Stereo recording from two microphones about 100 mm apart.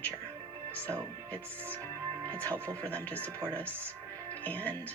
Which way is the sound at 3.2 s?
20° right (ahead or behind).